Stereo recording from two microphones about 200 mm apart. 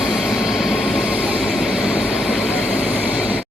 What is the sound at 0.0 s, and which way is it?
Vehicle, 5° right (ahead or behind).